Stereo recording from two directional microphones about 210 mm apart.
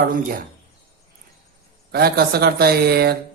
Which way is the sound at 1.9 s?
45° right (ahead or behind).